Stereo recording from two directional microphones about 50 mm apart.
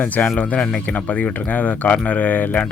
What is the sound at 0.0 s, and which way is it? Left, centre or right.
Speech, left.